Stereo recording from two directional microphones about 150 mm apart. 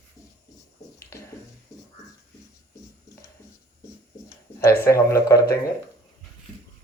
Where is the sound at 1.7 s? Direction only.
20° left (ahead or behind).